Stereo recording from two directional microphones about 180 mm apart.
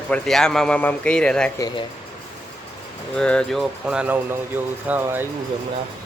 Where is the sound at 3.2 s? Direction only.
5° left (ahead or behind); by 5.3 s 10° right (ahead or behind).